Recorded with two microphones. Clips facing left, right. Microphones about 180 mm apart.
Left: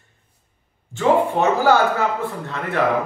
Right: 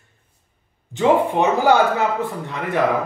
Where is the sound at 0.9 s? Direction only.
15° right (ahead or behind).